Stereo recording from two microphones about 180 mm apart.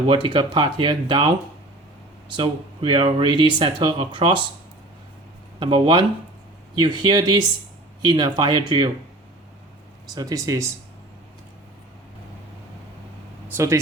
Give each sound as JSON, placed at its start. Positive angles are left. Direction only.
{"t": 0.1, "sound": "speech", "side_deg": -25}
{"t": 2.3, "sound": "speech", "side_deg": -25}
{"t": 5.5, "sound": "speech", "side_deg": -25}
{"t": 10.2, "sound": "speech", "side_deg": -20}
{"t": 13.5, "sound": "speech", "side_deg": -15}